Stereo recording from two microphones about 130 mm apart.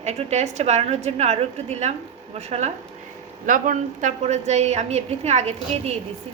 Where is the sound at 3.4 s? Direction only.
90° right.